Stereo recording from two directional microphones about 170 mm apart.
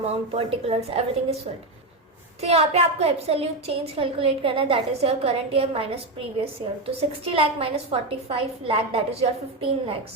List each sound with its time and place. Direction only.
0.3 s a woman's voice: 35° right (ahead or behind)
2.4 s a woman's voice: 35° right (ahead or behind)